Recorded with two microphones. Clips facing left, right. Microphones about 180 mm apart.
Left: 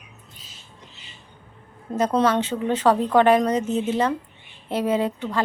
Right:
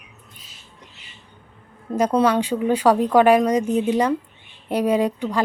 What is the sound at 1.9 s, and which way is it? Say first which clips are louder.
A woman's voice: right 2 dB; 10° right (ahead or behind).